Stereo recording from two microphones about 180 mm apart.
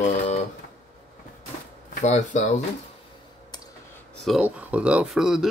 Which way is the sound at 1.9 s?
40° left (ahead or behind).